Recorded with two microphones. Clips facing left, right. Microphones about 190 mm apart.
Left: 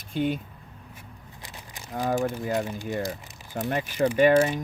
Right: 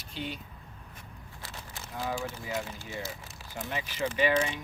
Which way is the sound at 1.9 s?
45° left (ahead or behind).